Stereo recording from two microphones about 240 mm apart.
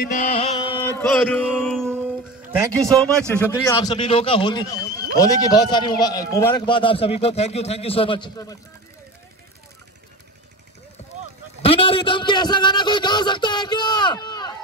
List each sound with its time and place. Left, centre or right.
0.0 s mantra: left
0.9 s a sound: centre
2.8 s a man's voice: centre
11.6 s a man's voice: left